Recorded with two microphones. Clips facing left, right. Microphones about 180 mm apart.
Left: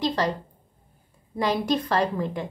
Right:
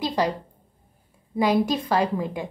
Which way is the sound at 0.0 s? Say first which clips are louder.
Right 1 dB; 10° right (ahead or behind).